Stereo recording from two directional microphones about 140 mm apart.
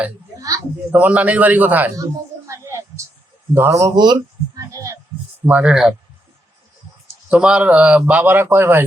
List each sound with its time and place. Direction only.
0.3 s a woman's voice: 25° right (ahead or behind)
0.9 s speech: 10° right (ahead or behind)
2.5 s a sound: 20° right (ahead or behind)
3.5 s speech: 20° right (ahead or behind)
5.5 s speech: 10° right (ahead or behind)
7.3 s speech: 5° right (ahead or behind)